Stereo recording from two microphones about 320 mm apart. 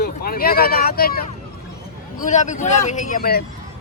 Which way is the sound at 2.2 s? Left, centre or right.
Left.